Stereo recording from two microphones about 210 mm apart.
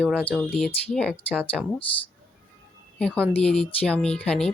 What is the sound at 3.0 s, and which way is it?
A woman's voice, 5° left (ahead or behind).